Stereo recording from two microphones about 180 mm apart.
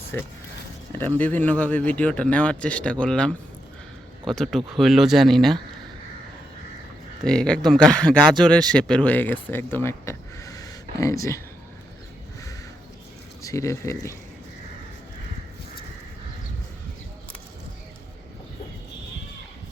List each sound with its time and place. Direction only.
0.1 s speech: 10° left (ahead or behind)
7.3 s speech: 5° left (ahead or behind)
13.4 s speech: 15° left (ahead or behind)